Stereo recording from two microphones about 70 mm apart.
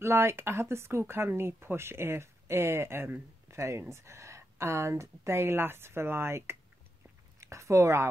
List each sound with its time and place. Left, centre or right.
0.0 s speech: right